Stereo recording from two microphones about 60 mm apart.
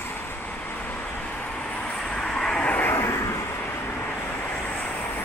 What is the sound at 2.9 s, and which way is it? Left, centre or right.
Vehicle, left.